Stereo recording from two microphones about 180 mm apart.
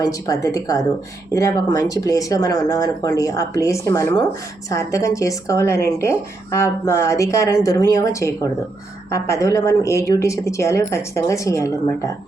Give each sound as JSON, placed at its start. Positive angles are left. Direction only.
{"t": 0.0, "sound": "a woman's voice", "side_deg": 20}